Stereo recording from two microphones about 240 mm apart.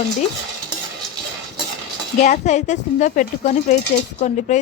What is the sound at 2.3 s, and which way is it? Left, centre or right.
A woman's voice, left.